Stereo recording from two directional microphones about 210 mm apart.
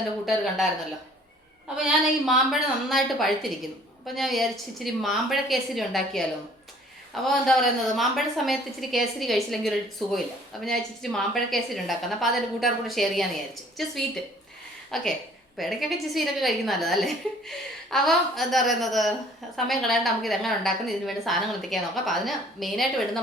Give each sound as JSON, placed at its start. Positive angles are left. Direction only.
{"t": 0.3, "sound": "a woman's voice", "side_deg": 0}
{"t": 1.7, "sound": "a woman's voice", "side_deg": 0}
{"t": 7.3, "sound": "a woman's voice", "side_deg": 0}